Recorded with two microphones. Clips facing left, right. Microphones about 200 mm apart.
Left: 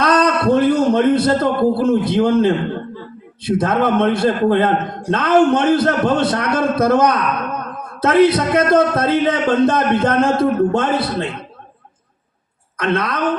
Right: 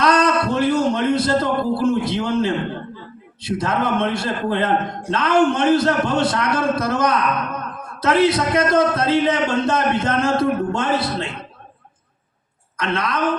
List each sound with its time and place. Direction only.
0.0 s a sound: 55° left (ahead or behind)
3.4 s a man's voice: 55° left (ahead or behind)
12.7 s a woman's voice: 55° left (ahead or behind)